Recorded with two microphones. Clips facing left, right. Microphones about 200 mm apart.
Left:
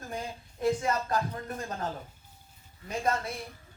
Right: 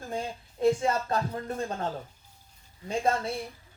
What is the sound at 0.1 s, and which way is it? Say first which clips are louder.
Speech: right 4 dB; 25° right (ahead or behind).